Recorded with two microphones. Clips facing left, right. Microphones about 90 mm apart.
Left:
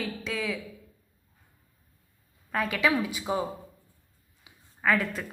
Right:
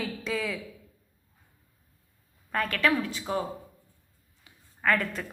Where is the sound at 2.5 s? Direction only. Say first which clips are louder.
Even; 5° left (ahead or behind).